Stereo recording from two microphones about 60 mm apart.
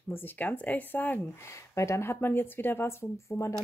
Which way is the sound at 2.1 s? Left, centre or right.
Left.